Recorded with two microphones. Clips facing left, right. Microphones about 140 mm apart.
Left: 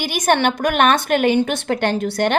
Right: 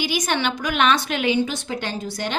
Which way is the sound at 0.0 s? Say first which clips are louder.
Left 6 dB; 55° left (ahead or behind).